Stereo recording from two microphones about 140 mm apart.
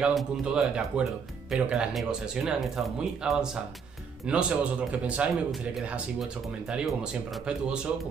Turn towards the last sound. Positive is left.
turn(degrees=-5)  # may be behind; listen again after turning